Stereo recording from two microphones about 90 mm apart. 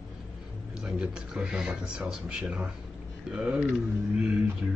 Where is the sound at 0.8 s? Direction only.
10° right (ahead or behind).